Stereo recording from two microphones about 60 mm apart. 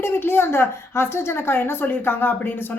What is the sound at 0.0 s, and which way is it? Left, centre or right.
A woman's voice, left.